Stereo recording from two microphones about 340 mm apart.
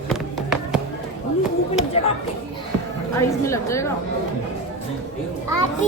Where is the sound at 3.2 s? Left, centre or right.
Centre.